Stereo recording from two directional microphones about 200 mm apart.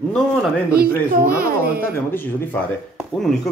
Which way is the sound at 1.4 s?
50° right (ahead or behind).